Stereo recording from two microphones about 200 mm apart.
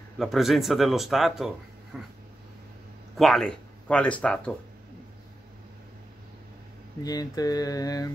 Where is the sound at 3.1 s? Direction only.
Centre (ahead or behind).